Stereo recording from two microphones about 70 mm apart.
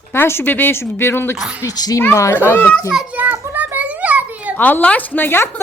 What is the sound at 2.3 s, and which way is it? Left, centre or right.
Speech, left.